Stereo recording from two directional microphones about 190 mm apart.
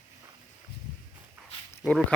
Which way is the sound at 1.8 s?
5° left (ahead or behind).